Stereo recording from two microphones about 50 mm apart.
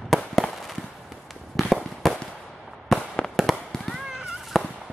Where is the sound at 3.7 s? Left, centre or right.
Centre.